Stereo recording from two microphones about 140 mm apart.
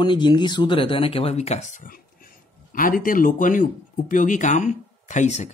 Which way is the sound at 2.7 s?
80° left.